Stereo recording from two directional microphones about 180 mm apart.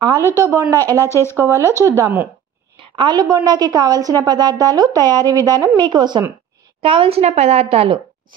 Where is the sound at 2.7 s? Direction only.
30° right (ahead or behind).